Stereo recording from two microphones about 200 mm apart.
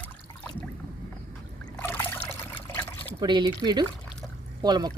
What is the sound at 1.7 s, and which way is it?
Trickle, 10° left (ahead or behind).